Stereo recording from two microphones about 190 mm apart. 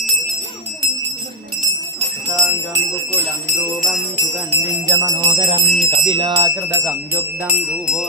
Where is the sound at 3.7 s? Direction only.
Centre (ahead or behind).